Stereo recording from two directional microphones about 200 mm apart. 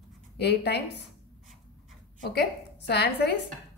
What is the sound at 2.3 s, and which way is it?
Speech, 55° left (ahead or behind).